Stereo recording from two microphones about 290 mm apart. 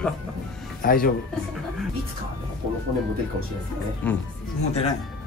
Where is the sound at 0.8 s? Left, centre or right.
Left.